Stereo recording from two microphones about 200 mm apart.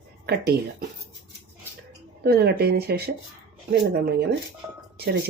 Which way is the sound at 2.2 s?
55° right (ahead or behind).